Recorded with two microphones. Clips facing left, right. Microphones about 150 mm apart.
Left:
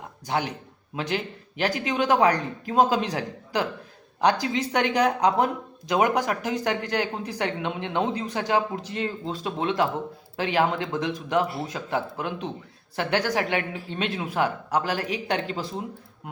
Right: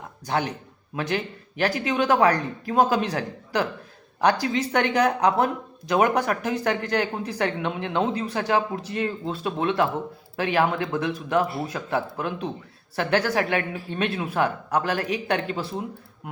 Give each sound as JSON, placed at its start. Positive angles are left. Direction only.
{"t": 0.3, "sound": "a man's voice", "side_deg": 15}